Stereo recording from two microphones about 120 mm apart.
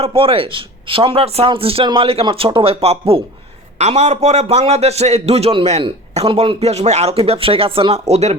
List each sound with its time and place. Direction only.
0.0 s a man's voice: 50° right (ahead or behind)
3.8 s a man's voice: 70° right (ahead or behind)